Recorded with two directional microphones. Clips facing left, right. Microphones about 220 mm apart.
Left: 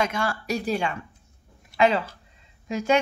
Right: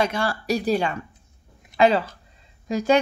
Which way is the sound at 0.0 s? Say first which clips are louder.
Right 3 dB; 35° right (ahead or behind).